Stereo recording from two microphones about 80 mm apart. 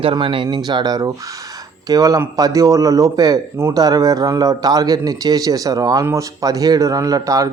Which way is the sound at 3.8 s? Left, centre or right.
Right.